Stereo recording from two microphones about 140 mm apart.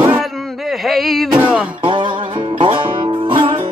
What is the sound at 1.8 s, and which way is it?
Music, 35° right (ahead or behind).